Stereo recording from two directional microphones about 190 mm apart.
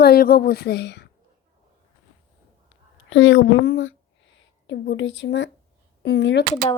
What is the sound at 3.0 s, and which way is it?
Speech, 75° left (ahead or behind).